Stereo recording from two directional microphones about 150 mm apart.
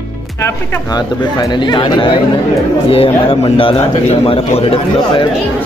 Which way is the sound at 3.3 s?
40° left (ahead or behind).